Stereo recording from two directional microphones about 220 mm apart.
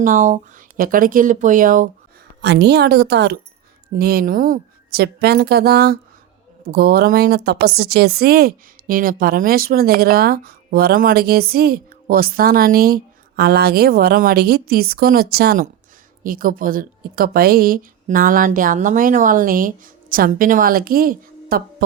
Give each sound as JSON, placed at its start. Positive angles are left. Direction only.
{"t": 0.0, "sound": "a woman's voice", "side_deg": -35}
{"t": 2.4, "sound": "a woman's voice", "side_deg": -50}